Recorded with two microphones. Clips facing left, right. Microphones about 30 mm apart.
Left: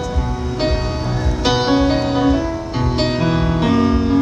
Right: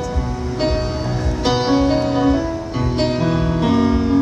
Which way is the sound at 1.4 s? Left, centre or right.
Left.